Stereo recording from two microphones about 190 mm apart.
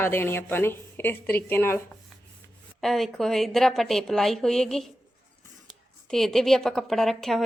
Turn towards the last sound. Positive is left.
turn(degrees=0)  # may be behind; listen again after turning